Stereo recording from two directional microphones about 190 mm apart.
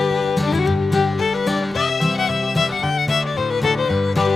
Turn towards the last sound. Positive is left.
turn(degrees=0)  # may be behind; listen again after turning